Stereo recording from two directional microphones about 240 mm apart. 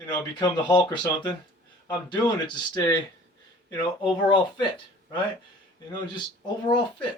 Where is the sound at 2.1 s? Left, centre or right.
Centre.